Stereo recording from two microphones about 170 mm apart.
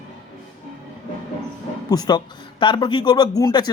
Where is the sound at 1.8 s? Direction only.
25° left (ahead or behind).